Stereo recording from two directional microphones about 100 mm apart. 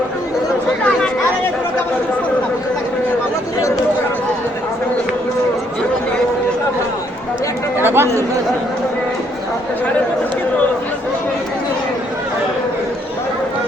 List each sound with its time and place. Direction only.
7.8 s chatter: 20° right (ahead or behind)